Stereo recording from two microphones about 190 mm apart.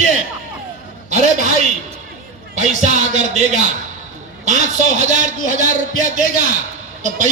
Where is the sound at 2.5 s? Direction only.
40° right (ahead or behind).